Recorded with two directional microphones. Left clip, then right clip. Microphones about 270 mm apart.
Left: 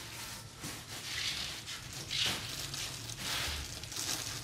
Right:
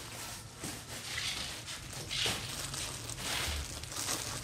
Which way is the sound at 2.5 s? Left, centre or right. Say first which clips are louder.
Even; right.